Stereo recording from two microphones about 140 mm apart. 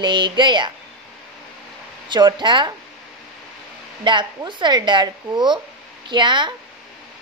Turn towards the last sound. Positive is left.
turn(degrees=-35)  # may be behind; listen again after turning